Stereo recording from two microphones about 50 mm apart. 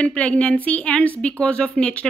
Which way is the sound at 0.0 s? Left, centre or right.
Left.